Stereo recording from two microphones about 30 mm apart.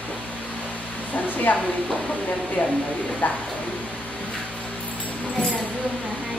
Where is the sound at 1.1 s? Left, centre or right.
Left.